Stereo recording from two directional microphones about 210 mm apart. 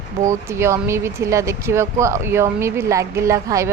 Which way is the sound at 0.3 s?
10° right (ahead or behind).